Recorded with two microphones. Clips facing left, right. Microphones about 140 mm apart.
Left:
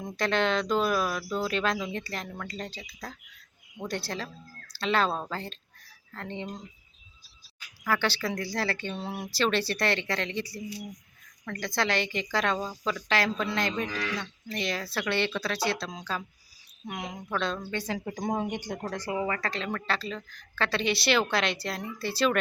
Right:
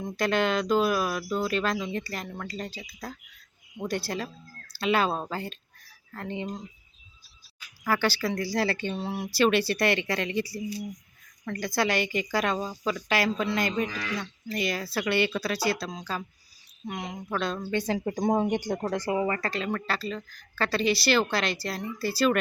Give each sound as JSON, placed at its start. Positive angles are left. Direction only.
{"t": 0.0, "sound": "a woman's voice", "side_deg": -5}
{"t": 7.9, "sound": "speech", "side_deg": -5}
{"t": 9.0, "sound": "a woman's voice", "side_deg": -5}
{"t": 18.0, "sound": "speech", "side_deg": -35}
{"t": 18.5, "sound": "speech", "side_deg": -45}
{"t": 19.2, "sound": "a woman's voice", "side_deg": -5}